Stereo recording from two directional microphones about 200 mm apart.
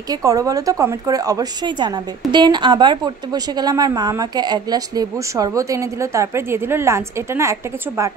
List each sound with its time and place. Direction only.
0.1 s a woman's voice: 15° right (ahead or behind)